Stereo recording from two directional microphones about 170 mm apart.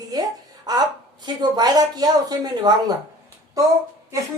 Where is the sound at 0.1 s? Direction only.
20° right (ahead or behind).